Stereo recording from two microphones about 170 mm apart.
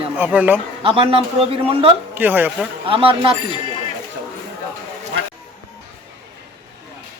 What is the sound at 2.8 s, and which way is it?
Speech, 30° right (ahead or behind).